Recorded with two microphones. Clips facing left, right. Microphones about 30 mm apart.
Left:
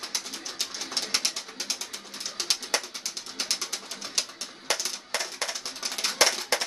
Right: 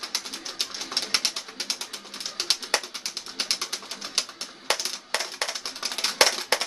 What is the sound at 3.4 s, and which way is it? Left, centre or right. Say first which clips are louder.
Bird: right 2 dB; right.